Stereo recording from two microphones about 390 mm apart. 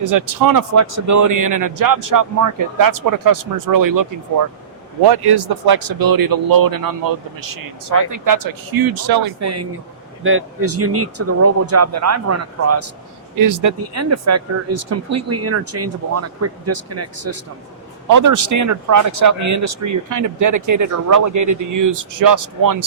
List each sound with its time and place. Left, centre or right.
0.0 s speech: right
5.0 s speech: right
9.4 s speech: right
13.4 s speech: right
18.1 s speech: right